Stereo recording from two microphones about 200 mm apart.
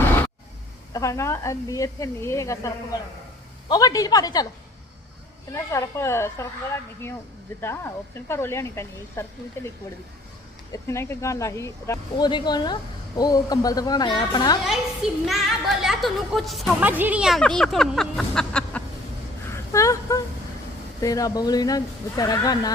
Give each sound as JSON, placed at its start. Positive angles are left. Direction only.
{"t": 0.9, "sound": "a woman's voice", "side_deg": 15}
{"t": 5.5, "sound": "speech", "side_deg": 15}
{"t": 7.6, "sound": "speech", "side_deg": 10}
{"t": 10.7, "sound": "speech", "side_deg": 15}
{"t": 14.6, "sound": "a woman's voice", "side_deg": 0}
{"t": 19.5, "sound": "a sound", "side_deg": 15}
{"t": 21.0, "sound": "speech", "side_deg": 15}